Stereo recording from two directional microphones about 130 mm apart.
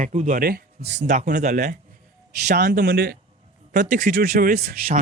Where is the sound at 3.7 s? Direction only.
85° right.